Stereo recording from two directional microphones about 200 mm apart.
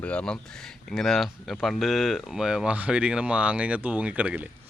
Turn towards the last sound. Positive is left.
turn(degrees=-5)  # may be behind; listen again after turning